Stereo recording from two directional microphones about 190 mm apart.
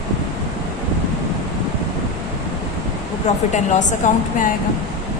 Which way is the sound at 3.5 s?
40° left (ahead or behind).